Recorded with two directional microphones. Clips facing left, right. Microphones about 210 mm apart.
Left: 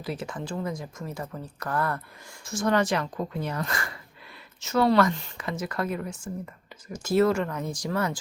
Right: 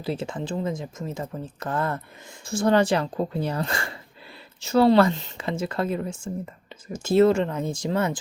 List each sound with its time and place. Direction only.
0.0 s speech: 25° right (ahead or behind)